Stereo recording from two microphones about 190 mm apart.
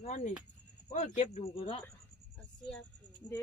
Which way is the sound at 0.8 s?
40° left (ahead or behind).